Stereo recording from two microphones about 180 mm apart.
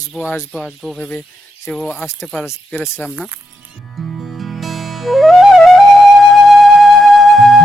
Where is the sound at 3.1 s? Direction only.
10° right (ahead or behind).